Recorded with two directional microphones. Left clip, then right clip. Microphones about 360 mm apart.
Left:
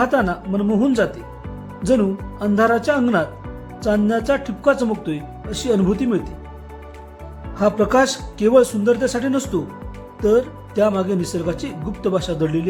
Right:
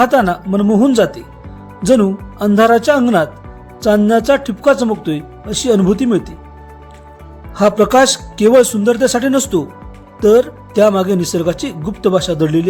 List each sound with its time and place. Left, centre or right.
0.0 s speech: centre
7.5 s speech: centre